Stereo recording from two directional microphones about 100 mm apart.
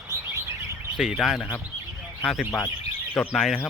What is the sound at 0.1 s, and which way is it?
Chirp, 30° right (ahead or behind).